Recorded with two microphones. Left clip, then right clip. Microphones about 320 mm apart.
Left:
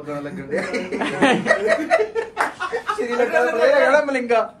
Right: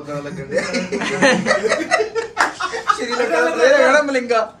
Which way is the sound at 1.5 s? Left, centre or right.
Left.